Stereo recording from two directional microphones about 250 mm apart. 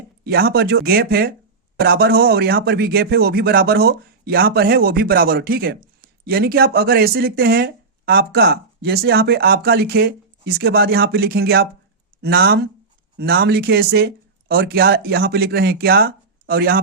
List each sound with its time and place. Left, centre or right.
0.3 s speech: right